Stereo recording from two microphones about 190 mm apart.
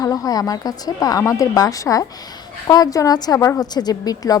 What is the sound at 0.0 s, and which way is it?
A woman's voice, 20° left (ahead or behind).